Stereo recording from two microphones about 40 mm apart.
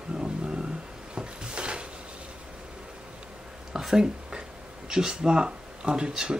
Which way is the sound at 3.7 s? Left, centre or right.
Centre.